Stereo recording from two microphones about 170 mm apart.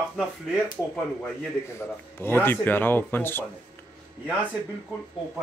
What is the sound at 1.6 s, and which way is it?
Speech, 15° left (ahead or behind).